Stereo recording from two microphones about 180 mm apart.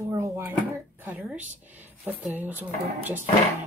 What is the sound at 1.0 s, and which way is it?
Speech, 5° right (ahead or behind).